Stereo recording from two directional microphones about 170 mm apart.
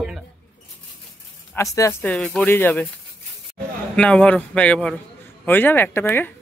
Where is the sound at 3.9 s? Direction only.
10° left (ahead or behind).